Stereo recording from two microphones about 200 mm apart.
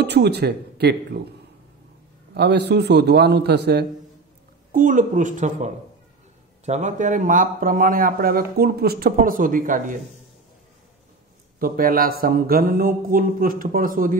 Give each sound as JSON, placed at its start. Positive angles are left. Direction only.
{"t": 0.0, "sound": "speech", "side_deg": -55}
{"t": 2.3, "sound": "a man's voice", "side_deg": -55}
{"t": 4.7, "sound": "a man's voice", "side_deg": -40}
{"t": 11.6, "sound": "a man's voice", "side_deg": -45}